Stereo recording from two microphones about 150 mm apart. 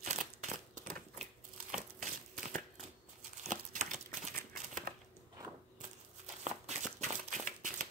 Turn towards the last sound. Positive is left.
turn(degrees=-55)  # may be behind; listen again after turning